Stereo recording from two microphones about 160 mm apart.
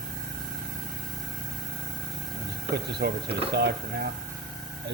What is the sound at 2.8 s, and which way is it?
Speech, 90° right.